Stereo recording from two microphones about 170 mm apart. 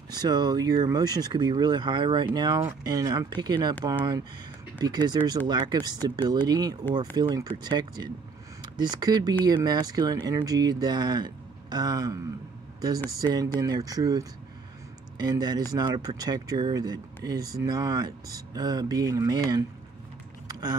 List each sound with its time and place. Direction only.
0.1 s speech: 25° right (ahead or behind)
4.7 s speech: 25° right (ahead or behind)